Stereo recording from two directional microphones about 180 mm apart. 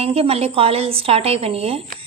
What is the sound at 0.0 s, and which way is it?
A woman's voice, 35° right (ahead or behind).